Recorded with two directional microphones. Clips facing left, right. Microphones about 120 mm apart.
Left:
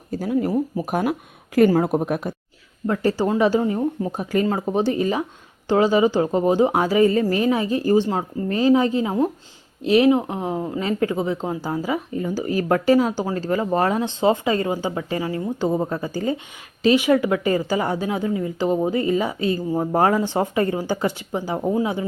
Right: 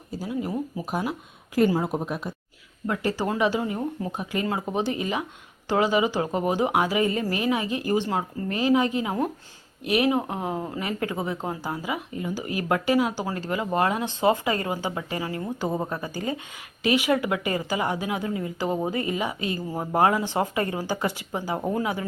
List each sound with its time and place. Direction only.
0.1 s speech: 50° left (ahead or behind)
2.8 s a woman's voice: 30° left (ahead or behind)
21.6 s speech: 15° left (ahead or behind)